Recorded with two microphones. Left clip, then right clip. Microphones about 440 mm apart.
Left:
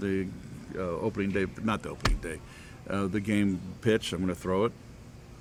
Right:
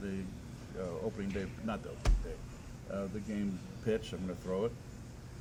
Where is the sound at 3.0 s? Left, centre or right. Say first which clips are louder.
Left 11 dB; left.